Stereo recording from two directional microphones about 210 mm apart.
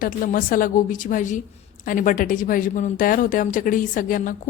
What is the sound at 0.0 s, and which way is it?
A woman's voice, 40° left (ahead or behind).